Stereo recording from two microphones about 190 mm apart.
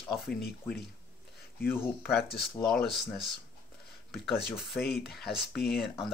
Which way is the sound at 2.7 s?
Centre (ahead or behind).